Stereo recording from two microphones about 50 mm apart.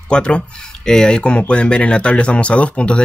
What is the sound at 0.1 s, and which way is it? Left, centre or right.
Speech, left.